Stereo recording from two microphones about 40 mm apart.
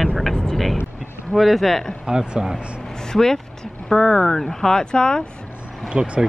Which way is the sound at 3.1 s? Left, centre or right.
Centre.